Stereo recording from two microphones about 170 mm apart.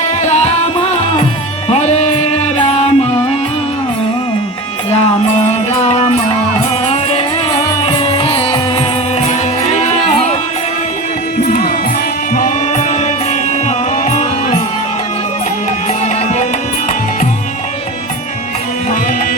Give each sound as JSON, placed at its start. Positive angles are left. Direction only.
{"t": 0.2, "sound": "music", "side_deg": 40}
{"t": 4.9, "sound": "music", "side_deg": 35}
{"t": 9.7, "sound": "music", "side_deg": 40}
{"t": 11.4, "sound": "music", "side_deg": 55}